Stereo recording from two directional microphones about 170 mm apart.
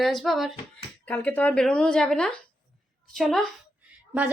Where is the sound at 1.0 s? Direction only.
10° left (ahead or behind).